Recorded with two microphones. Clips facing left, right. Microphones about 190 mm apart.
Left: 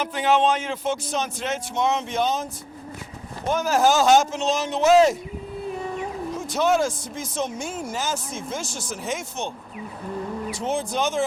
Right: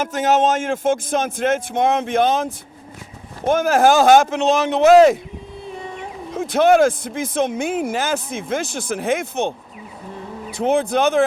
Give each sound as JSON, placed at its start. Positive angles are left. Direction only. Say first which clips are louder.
{"t": 0.0, "sound": "a man's voice", "louder": "right 3 dB", "side_deg": -45}
{"t": 3.5, "sound": "speech", "louder": "right 5 dB", "side_deg": -55}
{"t": 6.3, "sound": "speech", "louder": "right 8 dB", "side_deg": -55}
{"t": 10.5, "sound": "speech", "louder": "right 10 dB", "side_deg": -60}